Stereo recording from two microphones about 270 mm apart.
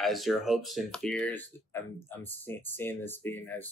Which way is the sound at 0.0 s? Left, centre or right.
Centre.